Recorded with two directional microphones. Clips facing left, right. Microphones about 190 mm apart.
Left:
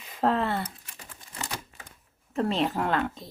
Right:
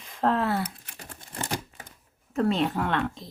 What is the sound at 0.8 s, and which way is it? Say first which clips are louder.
Crumpling: right 4 dB; 55° right (ahead or behind).